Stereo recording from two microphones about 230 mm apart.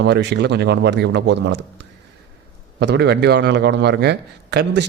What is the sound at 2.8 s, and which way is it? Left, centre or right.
Speech, right.